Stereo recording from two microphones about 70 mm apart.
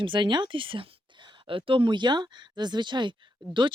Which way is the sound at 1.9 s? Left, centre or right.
Right.